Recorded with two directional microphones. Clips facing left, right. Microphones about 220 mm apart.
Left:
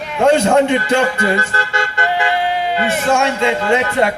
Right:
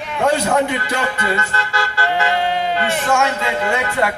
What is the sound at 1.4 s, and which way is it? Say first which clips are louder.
Vehicle: left 3 dB; 30° left (ahead or behind).